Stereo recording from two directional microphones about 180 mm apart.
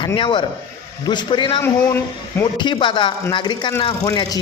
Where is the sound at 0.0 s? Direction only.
25° left (ahead or behind).